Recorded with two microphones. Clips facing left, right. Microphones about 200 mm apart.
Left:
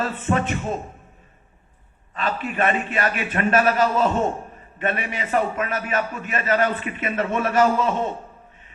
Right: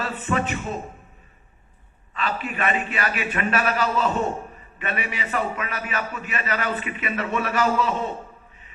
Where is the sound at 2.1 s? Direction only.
45° left (ahead or behind).